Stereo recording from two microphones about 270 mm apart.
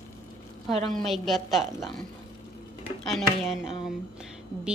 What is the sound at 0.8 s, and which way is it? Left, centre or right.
A woman's voice, centre.